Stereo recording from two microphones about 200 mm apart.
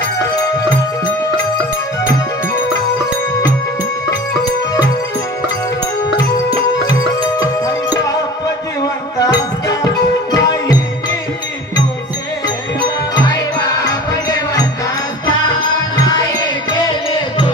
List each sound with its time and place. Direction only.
6.1 s music: 20° left (ahead or behind)
8.8 s music: 20° left (ahead or behind)
13.1 s music: 20° left (ahead or behind)